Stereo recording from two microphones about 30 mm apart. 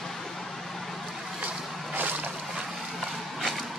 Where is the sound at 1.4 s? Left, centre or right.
Right.